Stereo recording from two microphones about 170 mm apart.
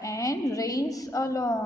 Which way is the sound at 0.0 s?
20° left (ahead or behind).